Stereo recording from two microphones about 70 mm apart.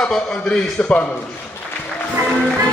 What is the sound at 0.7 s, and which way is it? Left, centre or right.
Speech, centre.